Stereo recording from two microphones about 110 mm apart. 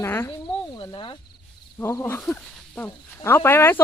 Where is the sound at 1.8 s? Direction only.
20° left (ahead or behind).